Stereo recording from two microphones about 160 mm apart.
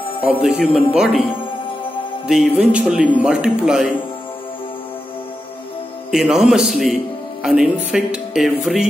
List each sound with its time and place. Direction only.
0.2 s speech: 5° right (ahead or behind)
2.2 s speech: 5° right (ahead or behind)
6.1 s speech: 5° right (ahead or behind)